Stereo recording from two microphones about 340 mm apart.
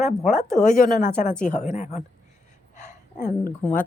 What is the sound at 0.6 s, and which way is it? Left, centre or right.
A woman's voice, left.